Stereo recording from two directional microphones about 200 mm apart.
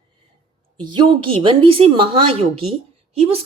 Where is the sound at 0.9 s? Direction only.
25° right (ahead or behind).